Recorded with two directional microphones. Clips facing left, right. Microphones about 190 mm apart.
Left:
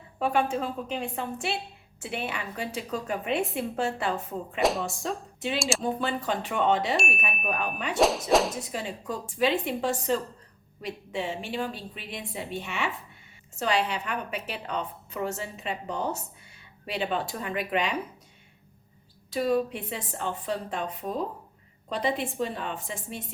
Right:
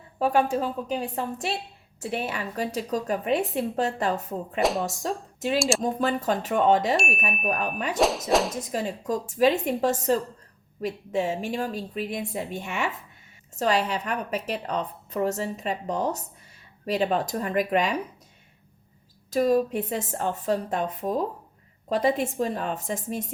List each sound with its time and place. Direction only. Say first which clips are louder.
0.2 s a woman's voice: right 3 dB; 40° right (ahead or behind)
4.6 s speech: right 1 dB; centre (ahead or behind)
4.9 s a woman's voice: right 2 dB; 40° right (ahead or behind)
5.5 s speech: right 5 dB; centre (ahead or behind)
5.8 s a woman's voice: right 4 dB; 40° right (ahead or behind)
6.9 s speech: right 3 dB; centre (ahead or behind)
7.4 s a woman's voice: right 3 dB; 40° right (ahead or behind)
7.9 s speech: left 1 dB; centre (ahead or behind)
8.7 s a woman's voice: right 6 dB; 40° right (ahead or behind)
19.3 s a woman's voice: right 4 dB; 45° right (ahead or behind)